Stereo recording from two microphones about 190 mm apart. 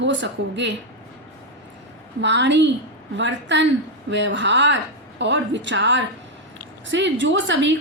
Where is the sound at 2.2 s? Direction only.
70° right (ahead or behind).